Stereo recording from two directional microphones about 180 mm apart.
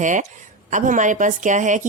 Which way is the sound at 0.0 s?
45° right (ahead or behind).